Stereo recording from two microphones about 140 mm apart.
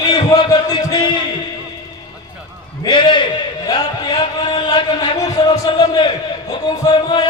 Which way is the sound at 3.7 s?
35° left (ahead or behind).